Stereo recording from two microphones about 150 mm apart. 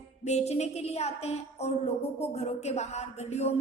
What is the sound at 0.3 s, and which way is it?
Speech, 45° left (ahead or behind).